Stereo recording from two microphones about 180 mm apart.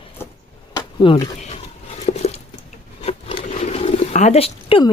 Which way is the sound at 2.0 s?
35° left (ahead or behind).